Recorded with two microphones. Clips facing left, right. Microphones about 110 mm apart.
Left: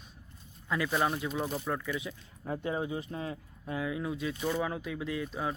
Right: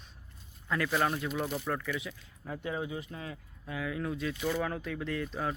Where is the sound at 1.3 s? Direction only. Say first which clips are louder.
Even; 25° left (ahead or behind).